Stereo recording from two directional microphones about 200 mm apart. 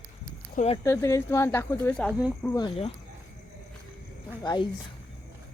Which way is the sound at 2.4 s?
15° left (ahead or behind).